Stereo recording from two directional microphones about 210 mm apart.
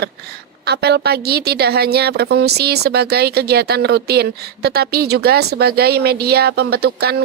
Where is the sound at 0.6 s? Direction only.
50° right (ahead or behind).